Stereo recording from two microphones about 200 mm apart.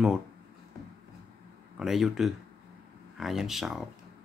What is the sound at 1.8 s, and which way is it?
Speech, centre (ahead or behind).